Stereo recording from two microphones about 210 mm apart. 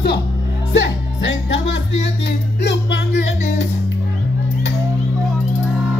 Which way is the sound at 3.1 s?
35° left (ahead or behind).